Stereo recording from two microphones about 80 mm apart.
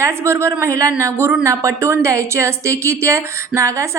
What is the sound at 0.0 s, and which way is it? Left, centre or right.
A woman's voice, right.